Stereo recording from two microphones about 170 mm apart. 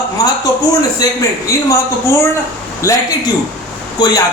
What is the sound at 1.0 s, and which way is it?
Speech, 20° left (ahead or behind).